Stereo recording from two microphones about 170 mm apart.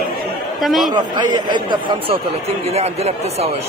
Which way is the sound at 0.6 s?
Centre (ahead or behind).